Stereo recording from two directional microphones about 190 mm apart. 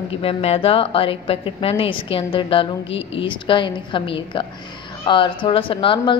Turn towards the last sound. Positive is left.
turn(degrees=25)  # may be behind; listen again after turning